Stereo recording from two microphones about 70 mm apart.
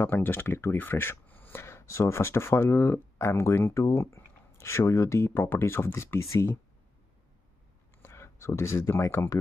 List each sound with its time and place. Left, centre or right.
0.0 s speech: left
8.0 s a sound: left
9.0 s speech: left